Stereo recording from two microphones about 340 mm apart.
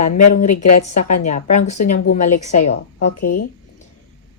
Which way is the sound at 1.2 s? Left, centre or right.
Left.